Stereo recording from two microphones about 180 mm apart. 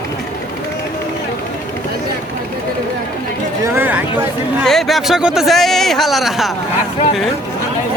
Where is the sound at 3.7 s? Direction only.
10° right (ahead or behind).